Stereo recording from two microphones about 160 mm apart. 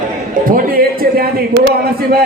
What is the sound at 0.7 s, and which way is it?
Speech, 65° right (ahead or behind).